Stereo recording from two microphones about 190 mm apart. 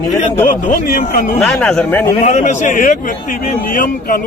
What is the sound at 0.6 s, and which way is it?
Speech, 45° left (ahead or behind).